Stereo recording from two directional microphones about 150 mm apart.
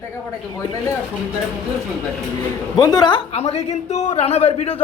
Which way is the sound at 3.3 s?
45° left (ahead or behind).